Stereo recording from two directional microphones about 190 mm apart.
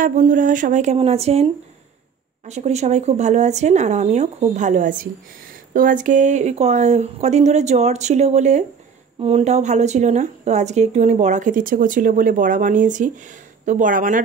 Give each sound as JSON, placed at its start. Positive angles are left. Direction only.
{"t": 0.0, "sound": "speech", "side_deg": -45}